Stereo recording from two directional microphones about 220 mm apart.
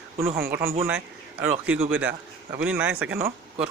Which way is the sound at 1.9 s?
5° right (ahead or behind).